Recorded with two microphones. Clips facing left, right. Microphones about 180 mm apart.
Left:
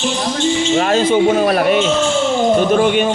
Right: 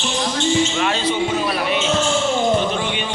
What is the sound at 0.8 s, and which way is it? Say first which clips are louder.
Speech: left 7 dB; 45° left (ahead or behind).